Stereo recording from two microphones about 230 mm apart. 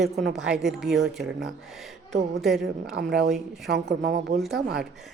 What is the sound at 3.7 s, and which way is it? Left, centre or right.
Speech, right.